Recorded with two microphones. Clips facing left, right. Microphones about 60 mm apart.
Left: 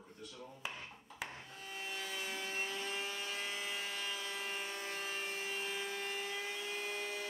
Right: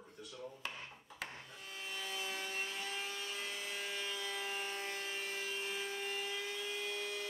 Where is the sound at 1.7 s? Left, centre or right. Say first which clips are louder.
Left 1 dB; centre.